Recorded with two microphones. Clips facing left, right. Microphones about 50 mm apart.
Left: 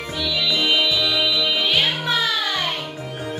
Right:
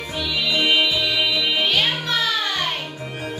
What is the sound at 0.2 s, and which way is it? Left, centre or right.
Music, right.